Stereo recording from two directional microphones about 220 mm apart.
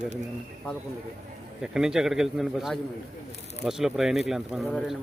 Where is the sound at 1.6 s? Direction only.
5° right (ahead or behind).